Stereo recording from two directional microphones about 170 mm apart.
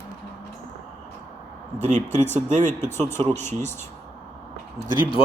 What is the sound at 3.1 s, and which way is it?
Speech, 10° left (ahead or behind).